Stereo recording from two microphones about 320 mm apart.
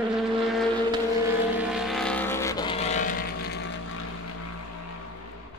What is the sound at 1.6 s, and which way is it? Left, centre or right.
Vehicle, centre.